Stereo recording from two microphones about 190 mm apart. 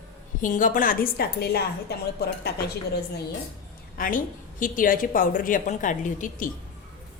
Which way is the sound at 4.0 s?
45° left (ahead or behind).